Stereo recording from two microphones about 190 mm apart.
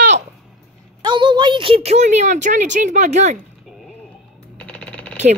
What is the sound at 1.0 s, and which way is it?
A woman's voice, 25° right (ahead or behind).